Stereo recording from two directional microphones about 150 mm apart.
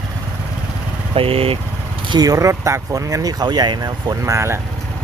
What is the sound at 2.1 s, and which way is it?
Speech, 25° right (ahead or behind).